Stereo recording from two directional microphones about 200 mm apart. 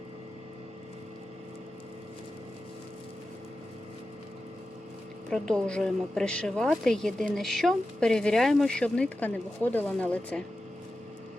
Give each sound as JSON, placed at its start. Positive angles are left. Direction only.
{"t": 5.3, "sound": "a woman's voice", "side_deg": 5}